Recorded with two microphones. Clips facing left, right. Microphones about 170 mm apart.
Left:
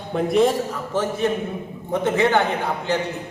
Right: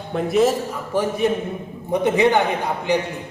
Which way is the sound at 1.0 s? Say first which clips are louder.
Right 2 dB; 15° right (ahead or behind).